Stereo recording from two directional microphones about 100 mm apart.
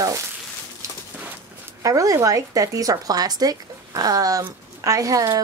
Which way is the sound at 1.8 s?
35° right (ahead or behind).